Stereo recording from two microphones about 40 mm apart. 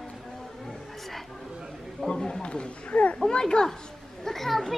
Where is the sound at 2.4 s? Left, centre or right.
Left.